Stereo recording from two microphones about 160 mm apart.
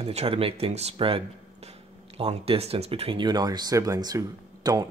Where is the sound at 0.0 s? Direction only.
40° right (ahead or behind).